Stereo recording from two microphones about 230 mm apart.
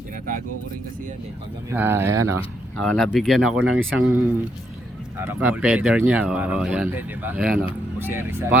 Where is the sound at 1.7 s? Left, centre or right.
Centre.